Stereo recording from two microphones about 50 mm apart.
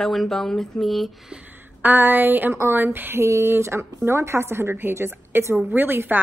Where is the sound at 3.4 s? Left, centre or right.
Right.